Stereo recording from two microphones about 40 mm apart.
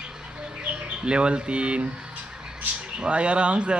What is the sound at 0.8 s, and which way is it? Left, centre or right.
Speech, right.